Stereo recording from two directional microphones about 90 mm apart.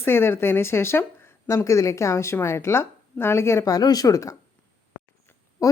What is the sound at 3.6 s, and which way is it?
Speech, 45° left (ahead or behind).